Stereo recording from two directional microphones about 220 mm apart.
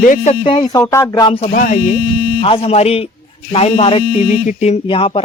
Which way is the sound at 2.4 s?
25° left (ahead or behind).